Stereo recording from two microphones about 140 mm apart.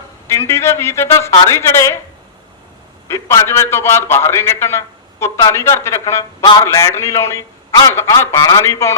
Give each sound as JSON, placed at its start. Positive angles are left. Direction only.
{"t": 0.3, "sound": "a man's voice", "side_deg": 20}
{"t": 3.1, "sound": "a man's voice", "side_deg": 20}
{"t": 6.4, "sound": "a man's voice", "side_deg": 35}
{"t": 6.8, "sound": "a man's voice", "side_deg": 20}